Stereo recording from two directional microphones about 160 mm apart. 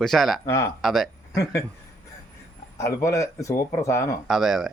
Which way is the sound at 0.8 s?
Centre (ahead or behind).